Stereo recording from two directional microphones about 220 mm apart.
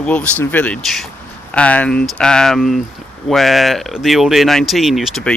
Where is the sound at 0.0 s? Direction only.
5° left (ahead or behind).